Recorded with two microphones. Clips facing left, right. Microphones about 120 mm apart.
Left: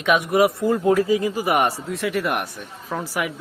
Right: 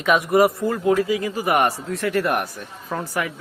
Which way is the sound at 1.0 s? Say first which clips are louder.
Left 2 dB; 25° left (ahead or behind).